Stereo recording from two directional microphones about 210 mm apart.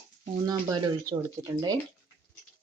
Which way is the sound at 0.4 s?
20° right (ahead or behind).